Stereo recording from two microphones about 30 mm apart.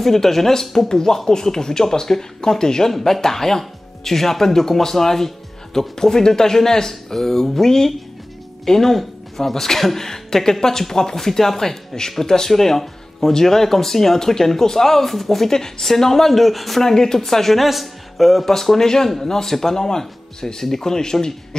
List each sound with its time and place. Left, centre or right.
0.0 s speech: centre
16.8 s speech: centre